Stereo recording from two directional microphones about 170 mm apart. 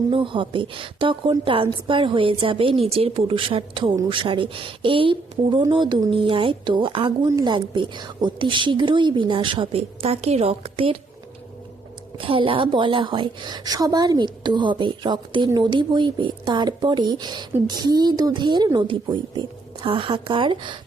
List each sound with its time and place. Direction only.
0.1 s a woman's voice: 30° right (ahead or behind)
12.1 s a woman's voice: 30° right (ahead or behind)